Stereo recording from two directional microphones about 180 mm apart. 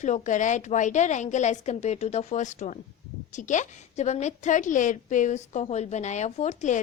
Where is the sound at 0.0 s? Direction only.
45° left (ahead or behind).